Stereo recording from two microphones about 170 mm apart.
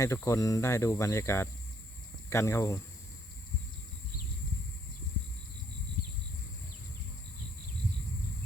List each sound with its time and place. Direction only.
0.0 s speech: 20° left (ahead or behind)